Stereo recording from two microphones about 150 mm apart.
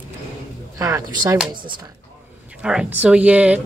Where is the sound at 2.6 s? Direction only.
5° right (ahead or behind).